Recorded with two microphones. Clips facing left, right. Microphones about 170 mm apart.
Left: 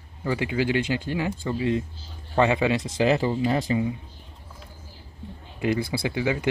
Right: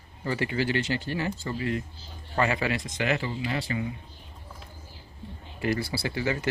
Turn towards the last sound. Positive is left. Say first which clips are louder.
# left 4 dB
turn(degrees=15)  # may be behind; listen again after turning